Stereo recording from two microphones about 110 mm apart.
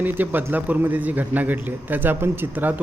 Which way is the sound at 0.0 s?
20° right (ahead or behind).